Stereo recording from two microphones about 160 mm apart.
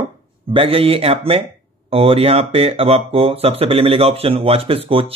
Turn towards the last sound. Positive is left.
turn(degrees=-35)  # may be behind; listen again after turning